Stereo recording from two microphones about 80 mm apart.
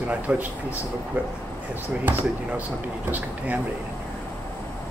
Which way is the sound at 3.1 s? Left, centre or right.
Right.